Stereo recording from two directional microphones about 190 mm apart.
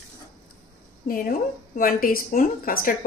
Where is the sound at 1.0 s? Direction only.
50° left (ahead or behind).